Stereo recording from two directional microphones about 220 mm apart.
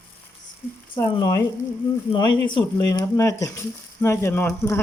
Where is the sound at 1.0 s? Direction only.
15° left (ahead or behind).